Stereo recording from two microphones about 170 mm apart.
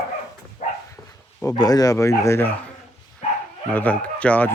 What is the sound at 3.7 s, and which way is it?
Speech, 10° left (ahead or behind).